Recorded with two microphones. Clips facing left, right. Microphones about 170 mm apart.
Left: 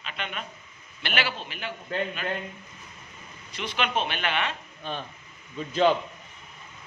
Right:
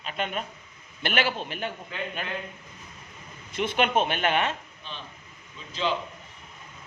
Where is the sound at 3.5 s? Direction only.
50° right (ahead or behind).